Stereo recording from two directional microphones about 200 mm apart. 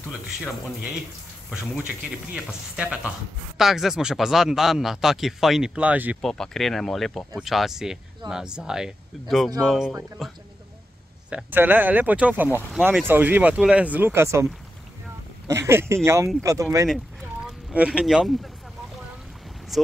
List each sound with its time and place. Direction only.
1.5 s speech: 5° right (ahead or behind)
17.5 s speech: 5° right (ahead or behind)
19.7 s speech: centre (ahead or behind)